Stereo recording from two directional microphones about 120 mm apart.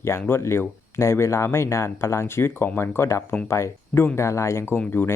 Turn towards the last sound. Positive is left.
turn(degrees=15)  # may be behind; listen again after turning